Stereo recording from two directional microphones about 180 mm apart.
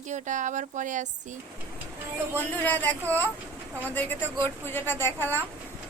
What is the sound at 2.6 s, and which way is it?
A woman's voice, 10° left (ahead or behind).